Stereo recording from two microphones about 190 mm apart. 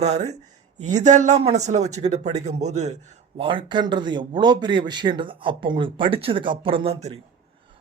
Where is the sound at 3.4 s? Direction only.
25° right (ahead or behind).